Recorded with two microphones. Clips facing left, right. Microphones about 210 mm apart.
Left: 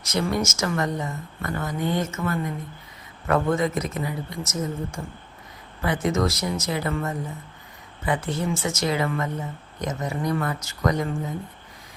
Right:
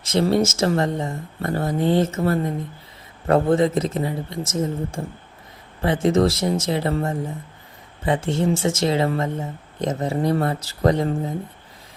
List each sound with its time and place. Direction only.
0.0 s a woman's voice: 30° right (ahead or behind)